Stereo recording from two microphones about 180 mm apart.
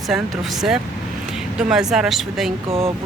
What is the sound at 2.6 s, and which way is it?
Speech, 30° right (ahead or behind).